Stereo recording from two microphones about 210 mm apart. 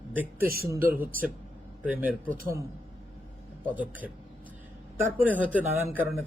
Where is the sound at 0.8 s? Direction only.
45° right (ahead or behind).